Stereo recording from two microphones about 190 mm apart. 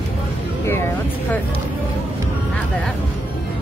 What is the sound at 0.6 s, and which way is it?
Speech, 10° left (ahead or behind).